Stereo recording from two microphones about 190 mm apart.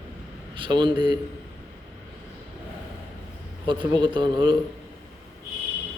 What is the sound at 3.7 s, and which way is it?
Speech, 25° right (ahead or behind).